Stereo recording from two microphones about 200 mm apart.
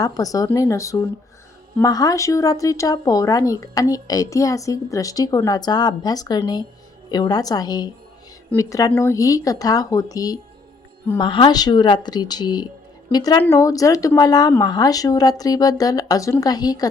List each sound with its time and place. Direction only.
0.0 s a woman's voice: 20° left (ahead or behind)